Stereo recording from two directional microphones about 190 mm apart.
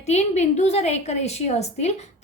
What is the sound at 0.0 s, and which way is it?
A woman's voice, 35° left (ahead or behind).